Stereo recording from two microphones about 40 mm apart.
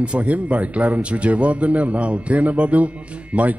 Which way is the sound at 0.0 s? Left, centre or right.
Right.